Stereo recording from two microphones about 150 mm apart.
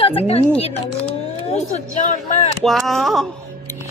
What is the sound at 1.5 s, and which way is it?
Speech, 45° left (ahead or behind).